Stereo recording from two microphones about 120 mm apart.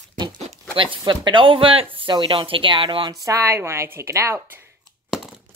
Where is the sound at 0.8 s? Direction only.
45° right (ahead or behind).